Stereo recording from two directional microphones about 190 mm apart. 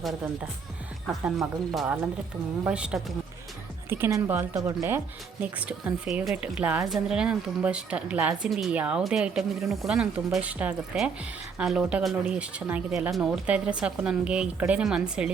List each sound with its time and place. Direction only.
1.2 s a woman's voice: centre (ahead or behind)